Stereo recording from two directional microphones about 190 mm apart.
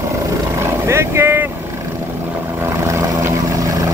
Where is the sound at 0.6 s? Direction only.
15° right (ahead or behind).